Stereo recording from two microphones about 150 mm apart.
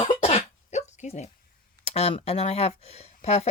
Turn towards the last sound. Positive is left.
turn(degrees=45)  # may be behind; listen again after turning